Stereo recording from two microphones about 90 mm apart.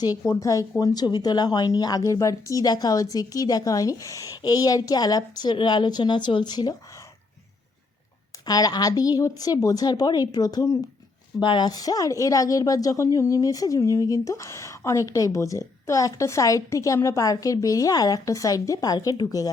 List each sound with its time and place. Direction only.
0.0 s speech: 40° left (ahead or behind)
8.4 s speech: 45° left (ahead or behind)
11.3 s speech: 60° left (ahead or behind); by 19.5 s 45° left (ahead or behind)